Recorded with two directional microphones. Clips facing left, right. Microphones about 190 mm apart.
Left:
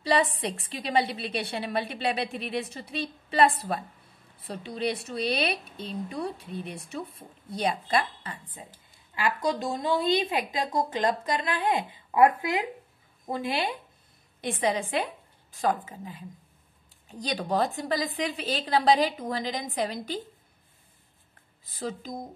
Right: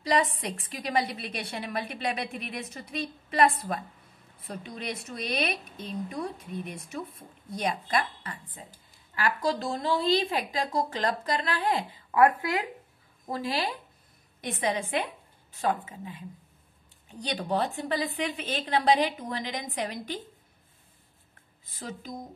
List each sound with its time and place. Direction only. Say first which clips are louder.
0.0 s a woman's voice: left 2 dB; 30° left (ahead or behind)
21.6 s a woman's voice: left 5 dB; 35° left (ahead or behind)